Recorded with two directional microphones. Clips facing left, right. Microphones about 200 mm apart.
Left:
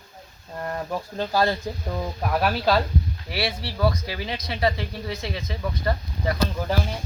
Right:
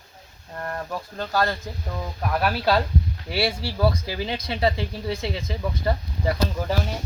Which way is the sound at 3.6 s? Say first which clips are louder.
Right 1 dB; 25° right (ahead or behind).